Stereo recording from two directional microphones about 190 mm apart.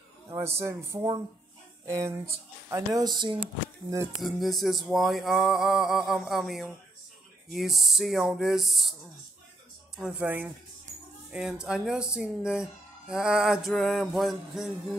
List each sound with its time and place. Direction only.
0.3 s speech: 15° right (ahead or behind)
4.2 s speech: centre (ahead or behind)
9.9 s speech: 5° right (ahead or behind)